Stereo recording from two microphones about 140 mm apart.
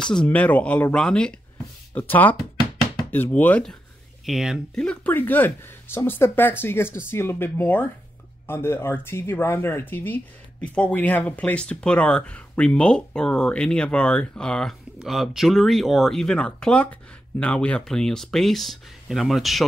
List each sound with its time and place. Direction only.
0.0 s speech: 5° left (ahead or behind)
4.3 s speech: centre (ahead or behind)
4.8 s speech: 10° left (ahead or behind)